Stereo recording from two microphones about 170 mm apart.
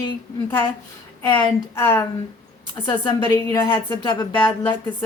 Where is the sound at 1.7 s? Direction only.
15° left (ahead or behind).